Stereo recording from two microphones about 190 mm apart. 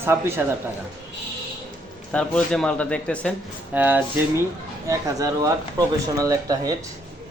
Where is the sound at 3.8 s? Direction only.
10° right (ahead or behind).